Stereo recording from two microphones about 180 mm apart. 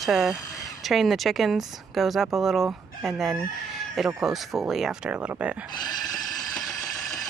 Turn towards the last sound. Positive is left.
turn(degrees=-10)  # may be behind; listen again after turning